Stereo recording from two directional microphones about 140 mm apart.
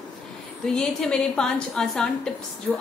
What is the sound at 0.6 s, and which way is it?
A woman's voice, 5° left (ahead or behind).